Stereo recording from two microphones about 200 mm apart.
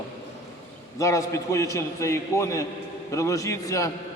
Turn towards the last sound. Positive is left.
turn(degrees=15)  # may be behind; listen again after turning